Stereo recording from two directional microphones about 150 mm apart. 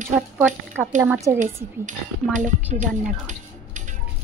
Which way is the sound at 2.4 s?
55° right (ahead or behind).